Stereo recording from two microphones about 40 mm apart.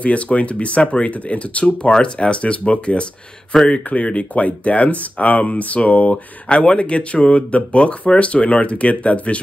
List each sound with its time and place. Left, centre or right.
0.0 s speech: left
1.8 s speech: left
6.5 s speech: left